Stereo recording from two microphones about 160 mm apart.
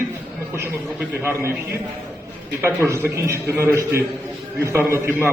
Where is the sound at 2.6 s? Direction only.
15° right (ahead or behind).